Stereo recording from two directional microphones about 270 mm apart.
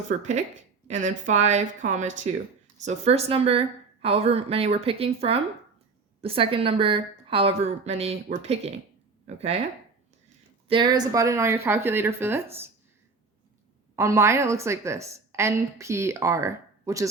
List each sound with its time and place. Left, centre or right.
0.1 s a woman's voice: right
10.7 s a woman's voice: centre
13.9 s a woman's voice: centre